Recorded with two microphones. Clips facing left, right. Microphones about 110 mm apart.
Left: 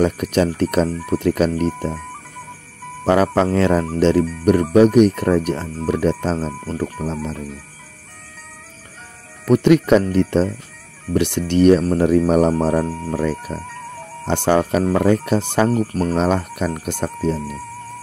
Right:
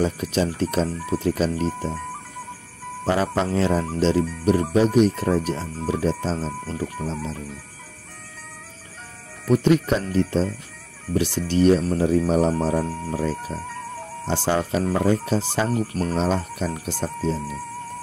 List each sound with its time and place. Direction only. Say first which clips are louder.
0.0 s speech: left 5 dB; 60° left (ahead or behind)
3.1 s speech: left 6 dB; 70° left (ahead or behind)
9.5 s speech: left 6 dB; 75° left (ahead or behind)
10.1 s speech: left 4 dB; 65° left (ahead or behind)
11.8 s speech: left 5 dB; 55° left (ahead or behind)
15.7 s speech: left 5 dB; 40° left (ahead or behind)
16.2 s speech: left 4 dB; 60° left (ahead or behind)